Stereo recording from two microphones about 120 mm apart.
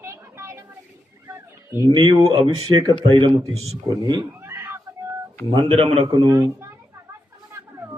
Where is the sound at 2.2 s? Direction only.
50° right (ahead or behind).